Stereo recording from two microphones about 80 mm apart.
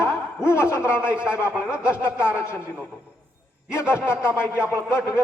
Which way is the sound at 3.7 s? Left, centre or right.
Left.